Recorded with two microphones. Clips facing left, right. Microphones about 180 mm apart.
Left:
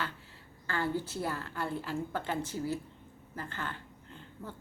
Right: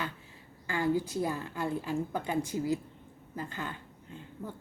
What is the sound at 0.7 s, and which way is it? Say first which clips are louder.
Speech: right 4 dB; 15° right (ahead or behind).